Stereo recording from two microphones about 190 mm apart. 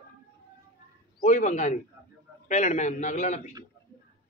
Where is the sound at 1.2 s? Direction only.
40° left (ahead or behind).